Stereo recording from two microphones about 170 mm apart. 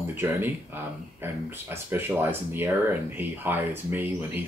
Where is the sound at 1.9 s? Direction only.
10° right (ahead or behind).